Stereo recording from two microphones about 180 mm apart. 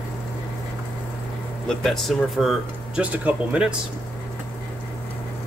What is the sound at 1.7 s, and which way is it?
Speech, centre (ahead or behind).